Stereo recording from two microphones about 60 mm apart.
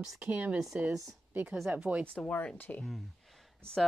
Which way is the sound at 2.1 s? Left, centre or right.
Left.